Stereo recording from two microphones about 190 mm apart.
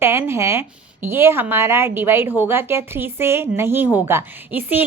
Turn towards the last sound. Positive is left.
turn(degrees=-10)  # may be behind; listen again after turning